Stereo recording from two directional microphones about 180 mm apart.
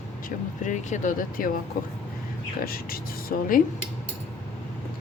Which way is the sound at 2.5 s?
55° left (ahead or behind).